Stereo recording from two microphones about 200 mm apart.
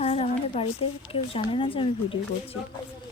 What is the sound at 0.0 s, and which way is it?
A woman's voice, 30° left (ahead or behind).